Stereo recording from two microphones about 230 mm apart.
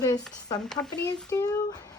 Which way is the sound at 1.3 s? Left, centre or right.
Centre.